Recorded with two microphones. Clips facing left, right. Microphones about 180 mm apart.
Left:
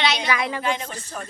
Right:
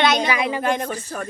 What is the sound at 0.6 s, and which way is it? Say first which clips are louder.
Speech: right 4 dB; 50° right (ahead or behind).